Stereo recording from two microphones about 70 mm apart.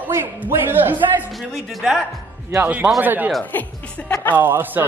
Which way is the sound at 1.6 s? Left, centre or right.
Centre.